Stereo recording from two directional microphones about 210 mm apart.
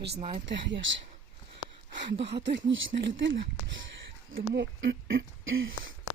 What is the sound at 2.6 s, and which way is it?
Speech, 60° right (ahead or behind).